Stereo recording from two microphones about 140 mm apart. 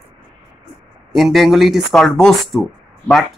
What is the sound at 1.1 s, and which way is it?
A man's voice, centre (ahead or behind).